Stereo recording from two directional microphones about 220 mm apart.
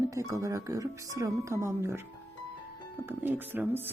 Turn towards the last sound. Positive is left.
turn(degrees=-10)  # may be behind; listen again after turning